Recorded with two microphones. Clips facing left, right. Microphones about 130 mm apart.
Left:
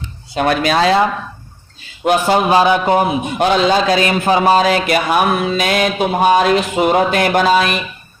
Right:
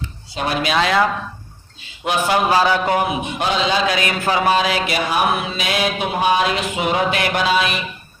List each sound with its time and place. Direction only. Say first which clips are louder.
0.3 s a man's voice: left 5 dB; 55° left (ahead or behind); by 1.0 s 35° left (ahead or behind)
2.0 s a man's voice: left 7 dB; 45° left (ahead or behind)
2.5 s a man's voice: left 6 dB; 20° left (ahead or behind)
3.3 s a man's voice: left 7 dB; 50° left (ahead or behind)